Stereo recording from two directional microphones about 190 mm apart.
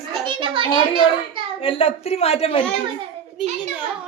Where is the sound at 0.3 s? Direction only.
25° right (ahead or behind).